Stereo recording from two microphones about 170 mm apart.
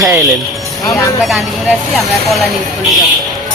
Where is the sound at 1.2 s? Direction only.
Centre (ahead or behind).